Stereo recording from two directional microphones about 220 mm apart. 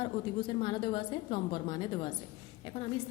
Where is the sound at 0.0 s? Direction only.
20° left (ahead or behind).